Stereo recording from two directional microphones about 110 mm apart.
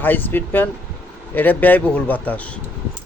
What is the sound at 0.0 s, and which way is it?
A man's voice, 15° left (ahead or behind).